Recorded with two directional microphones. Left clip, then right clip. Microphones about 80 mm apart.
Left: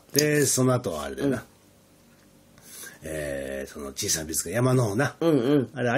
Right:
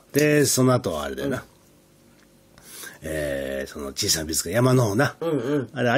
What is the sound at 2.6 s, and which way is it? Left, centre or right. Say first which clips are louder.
Speech: right 4 dB; right.